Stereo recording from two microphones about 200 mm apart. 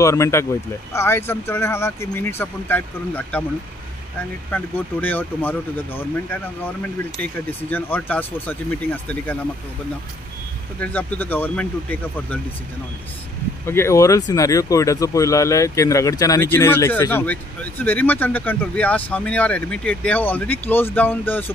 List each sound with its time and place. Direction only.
0.0 s speech: 15° left (ahead or behind)
4.5 s speech: 10° left (ahead or behind)
7.7 s speech: 10° left (ahead or behind)
10.8 s speech: 10° left (ahead or behind)
13.7 s speech: 15° left (ahead or behind)